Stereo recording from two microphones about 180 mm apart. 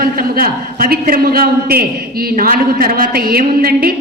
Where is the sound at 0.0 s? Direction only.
55° right (ahead or behind).